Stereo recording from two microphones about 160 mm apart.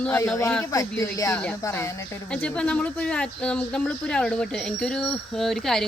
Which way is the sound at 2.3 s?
5° left (ahead or behind).